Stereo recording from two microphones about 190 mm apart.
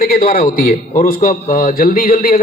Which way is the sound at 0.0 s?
45° left (ahead or behind).